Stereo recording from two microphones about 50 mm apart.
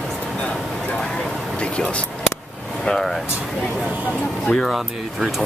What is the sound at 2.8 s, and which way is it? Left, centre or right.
Speech, centre.